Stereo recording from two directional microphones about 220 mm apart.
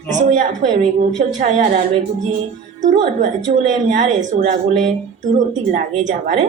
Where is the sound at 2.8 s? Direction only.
35° right (ahead or behind).